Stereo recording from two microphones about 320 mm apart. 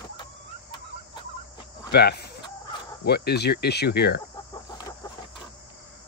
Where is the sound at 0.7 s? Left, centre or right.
Centre.